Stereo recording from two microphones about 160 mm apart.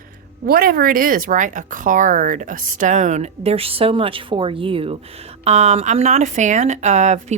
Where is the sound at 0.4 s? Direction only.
65° right (ahead or behind).